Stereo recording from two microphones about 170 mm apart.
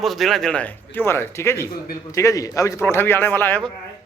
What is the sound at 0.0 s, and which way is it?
Speech, centre (ahead or behind).